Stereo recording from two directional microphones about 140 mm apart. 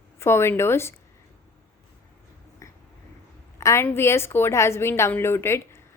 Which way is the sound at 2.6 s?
20° left (ahead or behind).